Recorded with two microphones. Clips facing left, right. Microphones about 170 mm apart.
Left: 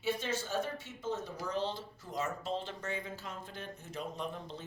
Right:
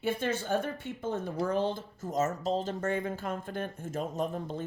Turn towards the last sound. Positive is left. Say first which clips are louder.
# right 8 dB
turn(degrees=-45)  # may be behind; listen again after turning